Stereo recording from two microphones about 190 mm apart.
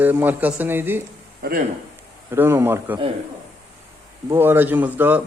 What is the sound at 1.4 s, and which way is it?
Speech, 50° right (ahead or behind).